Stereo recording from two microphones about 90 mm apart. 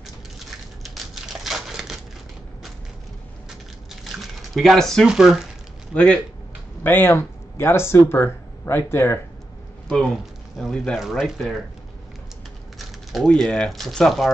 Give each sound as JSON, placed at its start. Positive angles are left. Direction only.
{"t": 0.8, "sound": "a sound", "side_deg": 0}
{"t": 3.4, "sound": "a sound", "side_deg": 0}
{"t": 5.0, "sound": "speech", "side_deg": -5}
{"t": 6.8, "sound": "speech", "side_deg": 20}
{"t": 9.8, "sound": "speech", "side_deg": 10}
{"t": 12.7, "sound": "speech", "side_deg": 0}